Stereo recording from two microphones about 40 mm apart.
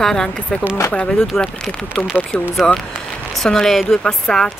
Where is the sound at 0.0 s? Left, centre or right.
Centre.